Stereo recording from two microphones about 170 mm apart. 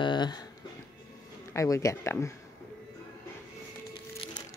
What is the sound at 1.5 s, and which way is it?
Speech, 20° left (ahead or behind).